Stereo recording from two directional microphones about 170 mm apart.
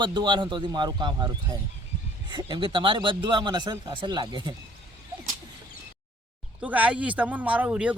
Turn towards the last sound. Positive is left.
turn(degrees=-10)  # may be behind; listen again after turning